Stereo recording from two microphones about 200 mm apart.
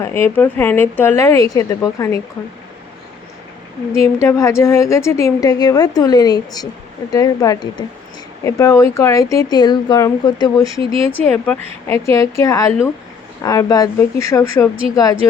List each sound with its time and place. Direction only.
0.0 s speech: 10° left (ahead or behind)
3.9 s speech: 15° left (ahead or behind)